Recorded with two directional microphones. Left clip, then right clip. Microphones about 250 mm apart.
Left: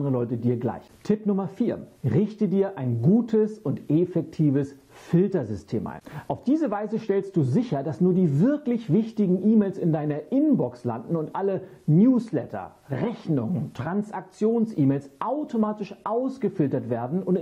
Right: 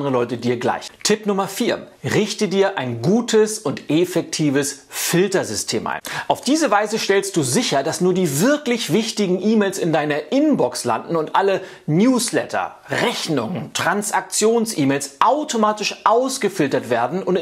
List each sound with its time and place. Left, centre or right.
0.0 s speech: centre
3.0 s speech: centre
3.3 s speech: centre